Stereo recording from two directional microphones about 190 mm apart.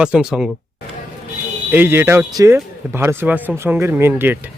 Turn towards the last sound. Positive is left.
turn(degrees=-10)  # may be behind; listen again after turning